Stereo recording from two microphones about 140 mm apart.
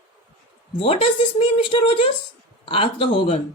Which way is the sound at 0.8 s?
40° left (ahead or behind).